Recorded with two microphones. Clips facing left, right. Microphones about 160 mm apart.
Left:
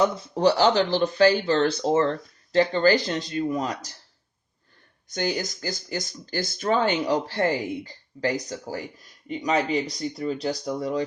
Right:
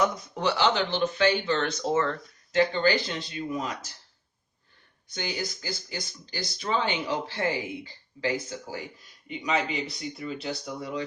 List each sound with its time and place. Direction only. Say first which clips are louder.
0.0 s speech: left 6 dB; 30° left (ahead or behind)
5.0 s speech: left 6 dB; 45° left (ahead or behind)